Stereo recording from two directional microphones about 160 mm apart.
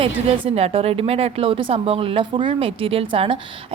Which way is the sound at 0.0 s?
40° right (ahead or behind).